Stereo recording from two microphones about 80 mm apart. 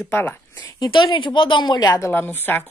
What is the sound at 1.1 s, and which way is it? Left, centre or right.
Speech, left.